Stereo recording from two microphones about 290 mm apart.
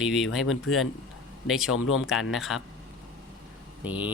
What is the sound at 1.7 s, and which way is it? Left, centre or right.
Speech, left.